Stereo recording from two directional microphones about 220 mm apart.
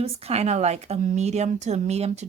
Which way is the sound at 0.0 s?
25° right (ahead or behind).